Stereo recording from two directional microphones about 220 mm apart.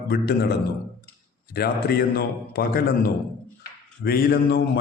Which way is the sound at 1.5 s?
45° left (ahead or behind).